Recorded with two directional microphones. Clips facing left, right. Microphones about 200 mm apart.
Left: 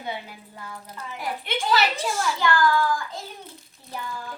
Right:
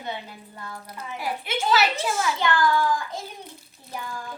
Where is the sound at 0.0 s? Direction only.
10° left (ahead or behind).